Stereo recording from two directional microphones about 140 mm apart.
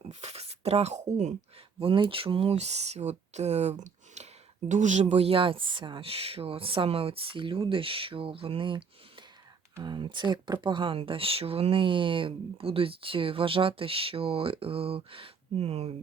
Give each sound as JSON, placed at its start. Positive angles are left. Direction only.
{"t": 0.1, "sound": "speech", "side_deg": -50}
{"t": 1.8, "sound": "speech", "side_deg": -40}